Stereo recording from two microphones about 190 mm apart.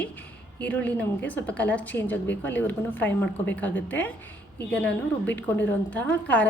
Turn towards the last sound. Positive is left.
turn(degrees=10)  # may be behind; listen again after turning